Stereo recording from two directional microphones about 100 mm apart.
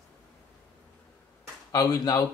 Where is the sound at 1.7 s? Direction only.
40° left (ahead or behind).